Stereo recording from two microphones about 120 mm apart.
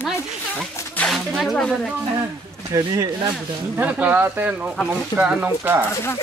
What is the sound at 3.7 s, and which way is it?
Speech, 10° right (ahead or behind).